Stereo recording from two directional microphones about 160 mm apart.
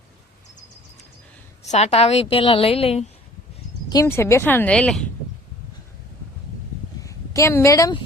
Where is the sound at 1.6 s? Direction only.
45° left (ahead or behind).